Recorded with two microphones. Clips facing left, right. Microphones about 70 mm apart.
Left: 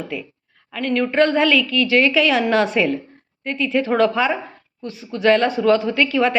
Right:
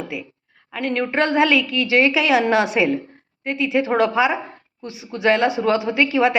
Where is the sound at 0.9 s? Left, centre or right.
Right.